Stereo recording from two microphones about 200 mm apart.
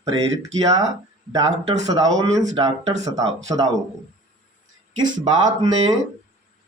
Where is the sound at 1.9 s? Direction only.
20° right (ahead or behind).